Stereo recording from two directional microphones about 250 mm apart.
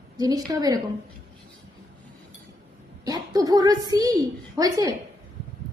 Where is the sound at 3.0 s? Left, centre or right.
Centre.